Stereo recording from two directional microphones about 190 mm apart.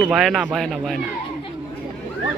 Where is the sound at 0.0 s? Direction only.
Centre (ahead or behind).